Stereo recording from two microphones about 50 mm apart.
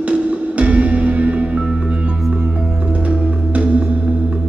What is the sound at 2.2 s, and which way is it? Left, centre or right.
Music, centre.